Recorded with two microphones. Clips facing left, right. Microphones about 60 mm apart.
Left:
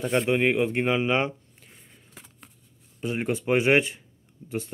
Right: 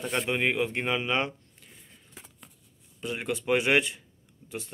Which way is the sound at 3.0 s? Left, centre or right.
Left.